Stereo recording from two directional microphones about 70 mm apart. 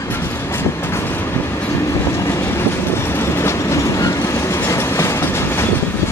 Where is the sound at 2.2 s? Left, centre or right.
Left.